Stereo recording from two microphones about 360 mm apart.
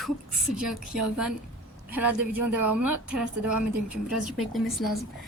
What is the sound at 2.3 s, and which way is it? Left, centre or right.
Speech, right.